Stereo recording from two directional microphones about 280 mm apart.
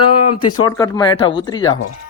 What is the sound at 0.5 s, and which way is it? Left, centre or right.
Speech, centre.